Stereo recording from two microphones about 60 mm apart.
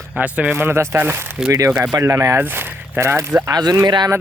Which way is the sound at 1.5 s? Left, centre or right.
Right.